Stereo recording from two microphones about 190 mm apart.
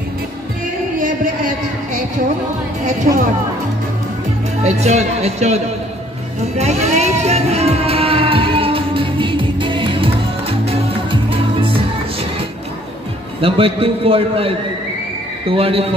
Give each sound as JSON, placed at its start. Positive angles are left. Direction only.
{"t": 0.9, "sound": "a sound", "side_deg": -40}
{"t": 2.8, "sound": "a man's voice", "side_deg": -40}
{"t": 4.6, "sound": "a man's voice", "side_deg": -35}
{"t": 6.4, "sound": "music", "side_deg": -35}
{"t": 13.4, "sound": "a man's voice", "side_deg": -30}